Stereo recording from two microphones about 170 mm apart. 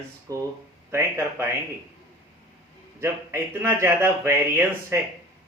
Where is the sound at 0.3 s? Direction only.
20° right (ahead or behind).